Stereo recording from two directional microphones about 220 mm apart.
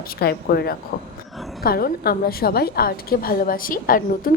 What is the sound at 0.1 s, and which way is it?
A woman's voice, 45° left (ahead or behind).